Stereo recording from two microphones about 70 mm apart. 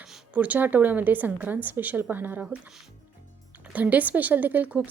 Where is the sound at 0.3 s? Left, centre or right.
Right.